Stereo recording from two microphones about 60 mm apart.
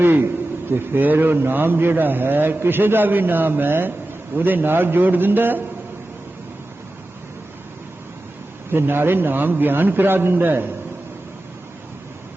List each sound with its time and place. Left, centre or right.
0.0 s a sound: right
0.7 s a man's voice: right
8.7 s a man's voice: right